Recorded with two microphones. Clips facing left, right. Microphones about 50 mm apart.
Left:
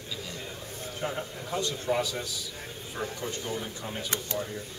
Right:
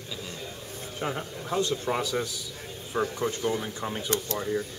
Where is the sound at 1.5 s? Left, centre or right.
Right.